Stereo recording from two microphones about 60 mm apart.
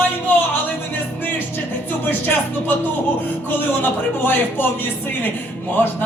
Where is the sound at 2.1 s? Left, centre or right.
Left.